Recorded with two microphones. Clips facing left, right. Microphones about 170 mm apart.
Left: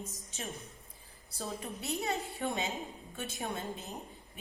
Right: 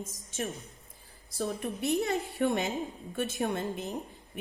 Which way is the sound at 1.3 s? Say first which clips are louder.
Right 7 dB; 60° right (ahead or behind).